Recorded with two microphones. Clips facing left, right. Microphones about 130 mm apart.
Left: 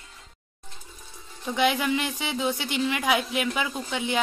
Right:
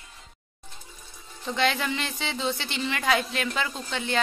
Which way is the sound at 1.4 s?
10° left (ahead or behind).